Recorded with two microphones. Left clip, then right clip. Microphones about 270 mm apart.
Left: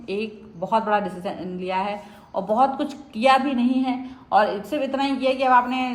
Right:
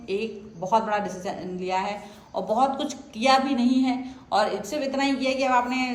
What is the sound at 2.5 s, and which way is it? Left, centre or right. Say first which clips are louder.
A woman's voice: left 3 dB; left.